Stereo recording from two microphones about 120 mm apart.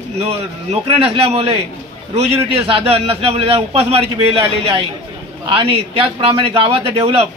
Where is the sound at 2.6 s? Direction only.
55° right (ahead or behind).